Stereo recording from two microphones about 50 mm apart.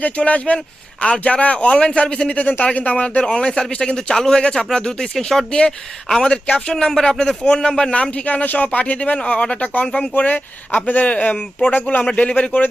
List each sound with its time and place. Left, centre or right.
0.0 s speech: left
3.2 s speech: centre
6.3 s speech: left
10.2 s speech: left